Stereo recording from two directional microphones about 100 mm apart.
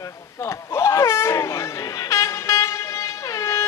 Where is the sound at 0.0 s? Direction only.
25° left (ahead or behind).